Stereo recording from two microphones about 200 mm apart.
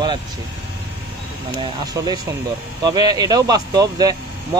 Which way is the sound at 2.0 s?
15° right (ahead or behind).